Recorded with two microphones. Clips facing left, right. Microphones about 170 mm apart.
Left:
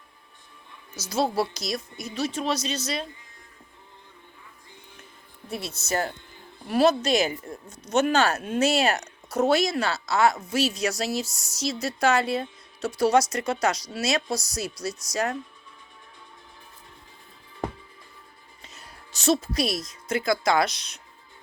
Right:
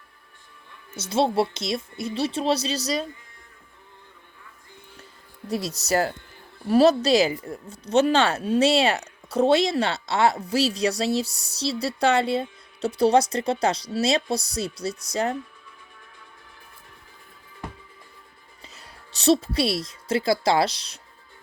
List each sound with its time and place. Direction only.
0.9 s speech: 25° right (ahead or behind)
5.5 s speech: 35° right (ahead or behind)
18.6 s speech: 30° right (ahead or behind)